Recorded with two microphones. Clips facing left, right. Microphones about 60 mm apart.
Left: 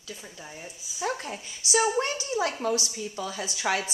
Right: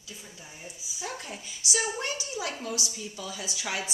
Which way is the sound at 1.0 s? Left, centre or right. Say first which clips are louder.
Left 7 dB; left.